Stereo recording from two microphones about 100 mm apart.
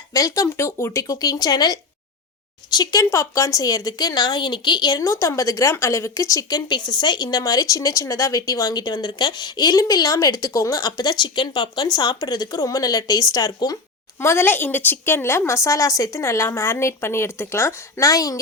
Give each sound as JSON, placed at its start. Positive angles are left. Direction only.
{"t": 0.1, "sound": "speech", "side_deg": 35}
{"t": 14.2, "sound": "speech", "side_deg": 25}